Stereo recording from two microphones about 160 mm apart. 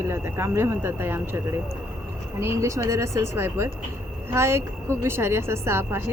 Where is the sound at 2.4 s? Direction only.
20° right (ahead or behind).